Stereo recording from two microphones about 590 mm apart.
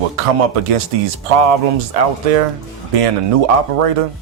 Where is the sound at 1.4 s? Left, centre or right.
Right.